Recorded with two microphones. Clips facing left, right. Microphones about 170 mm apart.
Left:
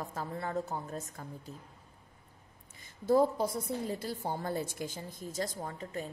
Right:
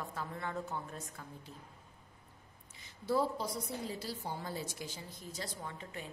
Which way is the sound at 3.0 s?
45° left (ahead or behind).